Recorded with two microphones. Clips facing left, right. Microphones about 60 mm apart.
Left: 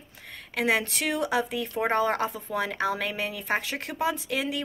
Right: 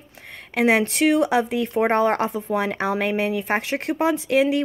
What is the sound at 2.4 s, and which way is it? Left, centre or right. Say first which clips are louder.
Speech: right 4 dB; right.